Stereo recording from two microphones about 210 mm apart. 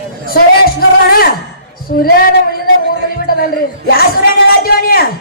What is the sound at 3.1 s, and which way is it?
A man's voice, 45° left (ahead or behind).